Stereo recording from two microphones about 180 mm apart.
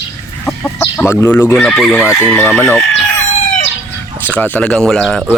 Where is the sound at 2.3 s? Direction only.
10° left (ahead or behind).